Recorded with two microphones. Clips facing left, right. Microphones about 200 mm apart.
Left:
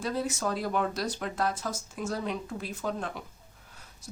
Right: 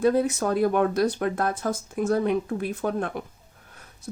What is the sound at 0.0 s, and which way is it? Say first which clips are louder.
Speech: right 9 dB; 55° right (ahead or behind).